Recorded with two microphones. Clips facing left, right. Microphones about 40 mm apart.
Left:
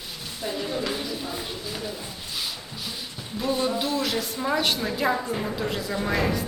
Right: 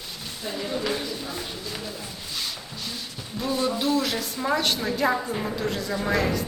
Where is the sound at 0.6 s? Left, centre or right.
Centre.